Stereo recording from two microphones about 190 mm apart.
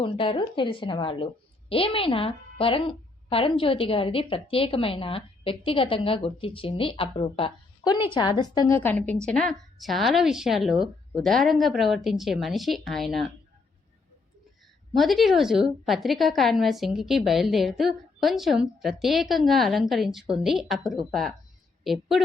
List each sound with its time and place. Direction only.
0.0 s a woman's voice: 25° left (ahead or behind); by 13.3 s centre (ahead or behind)
14.9 s a woman's voice: centre (ahead or behind)